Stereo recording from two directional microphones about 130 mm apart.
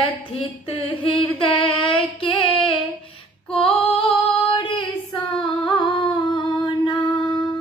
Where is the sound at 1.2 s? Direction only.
45° left (ahead or behind).